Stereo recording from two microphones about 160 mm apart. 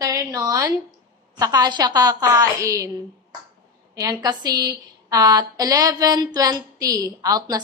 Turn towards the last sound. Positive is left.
turn(degrees=-25)  # may be behind; listen again after turning